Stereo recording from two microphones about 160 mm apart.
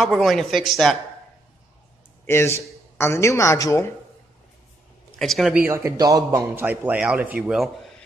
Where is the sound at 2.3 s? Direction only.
15° left (ahead or behind).